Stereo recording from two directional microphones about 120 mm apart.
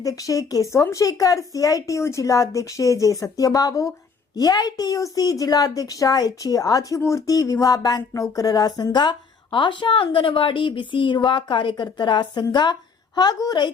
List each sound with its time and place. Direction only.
0.0 s a woman's voice: 30° left (ahead or behind)